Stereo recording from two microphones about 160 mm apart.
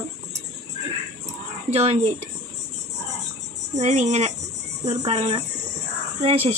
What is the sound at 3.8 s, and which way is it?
Speech, 45° right (ahead or behind).